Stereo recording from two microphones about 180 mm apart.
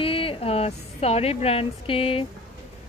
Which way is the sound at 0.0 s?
30° left (ahead or behind).